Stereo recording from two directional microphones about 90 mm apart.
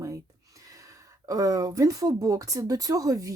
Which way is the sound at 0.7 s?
40° right (ahead or behind).